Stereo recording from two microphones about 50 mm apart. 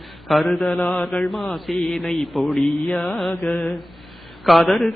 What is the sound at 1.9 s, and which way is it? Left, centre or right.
Mantra, centre.